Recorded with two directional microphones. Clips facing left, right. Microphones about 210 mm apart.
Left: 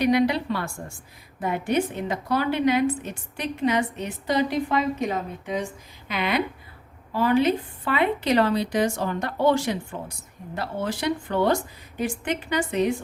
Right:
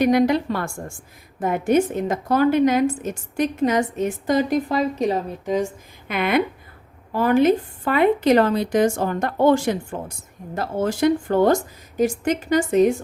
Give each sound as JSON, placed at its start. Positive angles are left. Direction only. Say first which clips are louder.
{"t": 0.0, "sound": "a woman's voice", "louder": "right 4 dB", "side_deg": -45}
{"t": 6.1, "sound": "a woman's voice", "louder": "right 5 dB", "side_deg": -55}